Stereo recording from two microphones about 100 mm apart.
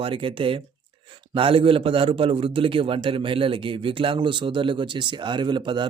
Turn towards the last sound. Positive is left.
turn(degrees=-50)  # may be behind; listen again after turning